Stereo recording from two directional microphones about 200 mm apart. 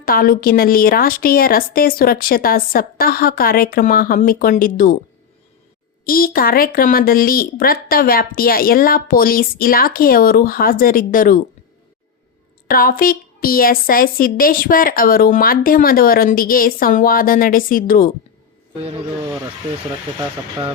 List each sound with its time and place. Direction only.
0.0 s a woman's voice: 45° left (ahead or behind)
6.1 s a woman's voice: 45° left (ahead or behind)
12.6 s a woman's voice: 45° left (ahead or behind)
18.8 s speech: 30° right (ahead or behind)